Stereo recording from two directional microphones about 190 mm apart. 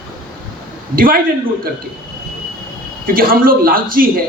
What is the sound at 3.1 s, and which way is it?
Speech, 50° right (ahead or behind).